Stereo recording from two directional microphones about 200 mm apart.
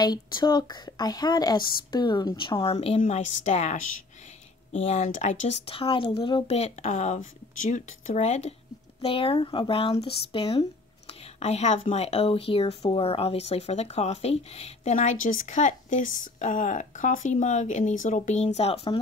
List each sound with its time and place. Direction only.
0.0 s speech: 20° left (ahead or behind)